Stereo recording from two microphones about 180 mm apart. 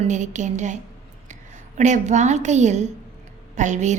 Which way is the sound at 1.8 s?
40° right (ahead or behind).